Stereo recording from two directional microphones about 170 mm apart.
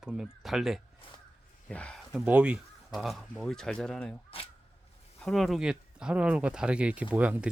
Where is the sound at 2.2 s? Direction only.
5° right (ahead or behind).